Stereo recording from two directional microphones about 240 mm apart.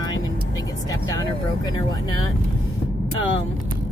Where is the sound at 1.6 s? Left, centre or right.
Centre.